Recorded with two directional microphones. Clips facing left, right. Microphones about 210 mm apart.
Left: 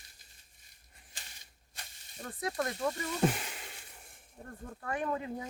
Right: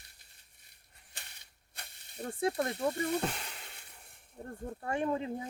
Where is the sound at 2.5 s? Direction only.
60° right (ahead or behind).